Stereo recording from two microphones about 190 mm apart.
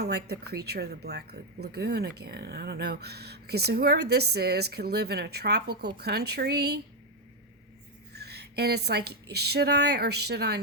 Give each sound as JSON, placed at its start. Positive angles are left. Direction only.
{"t": 0.0, "sound": "speech", "side_deg": -55}
{"t": 8.1, "sound": "speech", "side_deg": -60}